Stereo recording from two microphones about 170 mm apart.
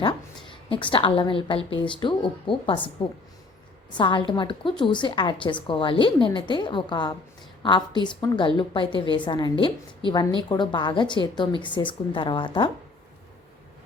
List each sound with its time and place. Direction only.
0.0 s a woman's voice: 30° left (ahead or behind)
3.9 s a woman's voice: 30° left (ahead or behind)